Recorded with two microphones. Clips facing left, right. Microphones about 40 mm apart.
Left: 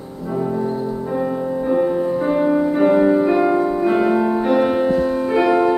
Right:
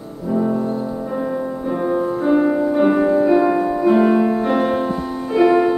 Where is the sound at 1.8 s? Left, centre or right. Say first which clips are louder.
Right 1 dB; centre.